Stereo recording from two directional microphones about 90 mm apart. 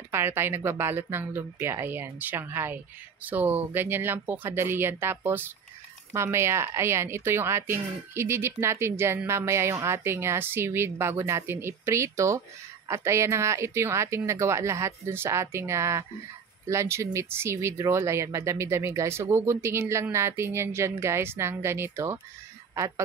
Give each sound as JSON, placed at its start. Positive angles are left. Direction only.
{"t": 0.1, "sound": "a woman's voice", "side_deg": -25}